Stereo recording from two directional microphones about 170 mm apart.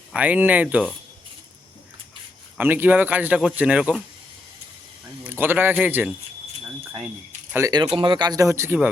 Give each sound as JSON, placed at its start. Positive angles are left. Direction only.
{"t": 0.1, "sound": "speech", "side_deg": -10}
{"t": 2.6, "sound": "speech", "side_deg": -10}
{"t": 5.2, "sound": "a man's voice", "side_deg": -10}
{"t": 7.5, "sound": "speech", "side_deg": -20}